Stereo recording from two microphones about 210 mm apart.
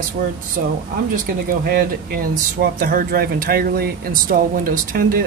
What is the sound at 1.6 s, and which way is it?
Speech, 45° right (ahead or behind).